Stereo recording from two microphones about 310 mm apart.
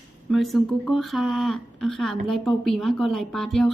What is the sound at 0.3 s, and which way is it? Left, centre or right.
Speech, centre.